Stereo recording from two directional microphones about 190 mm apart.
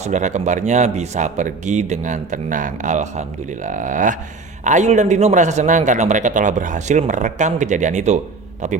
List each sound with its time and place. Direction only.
0.0 s speech: 40° right (ahead or behind)